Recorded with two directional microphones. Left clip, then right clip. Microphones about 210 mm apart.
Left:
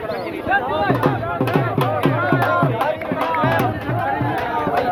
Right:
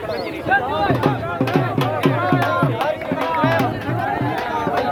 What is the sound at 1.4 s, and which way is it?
Music, 30° left (ahead or behind).